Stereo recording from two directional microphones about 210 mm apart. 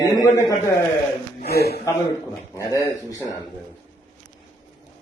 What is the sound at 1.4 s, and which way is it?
Speech, 50° left (ahead or behind).